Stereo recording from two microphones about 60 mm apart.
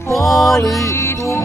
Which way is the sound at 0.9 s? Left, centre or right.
Left.